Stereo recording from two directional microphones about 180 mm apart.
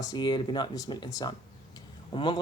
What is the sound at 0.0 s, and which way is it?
Speech, 25° left (ahead or behind).